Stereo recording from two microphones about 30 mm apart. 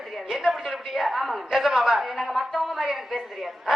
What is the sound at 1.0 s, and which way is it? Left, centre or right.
A woman's voice, centre.